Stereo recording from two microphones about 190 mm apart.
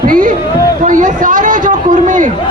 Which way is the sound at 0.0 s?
45° right (ahead or behind).